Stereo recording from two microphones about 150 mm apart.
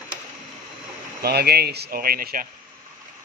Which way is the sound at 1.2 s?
90° right.